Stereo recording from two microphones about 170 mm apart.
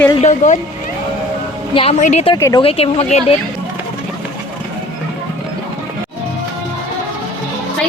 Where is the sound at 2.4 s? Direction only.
20° left (ahead or behind).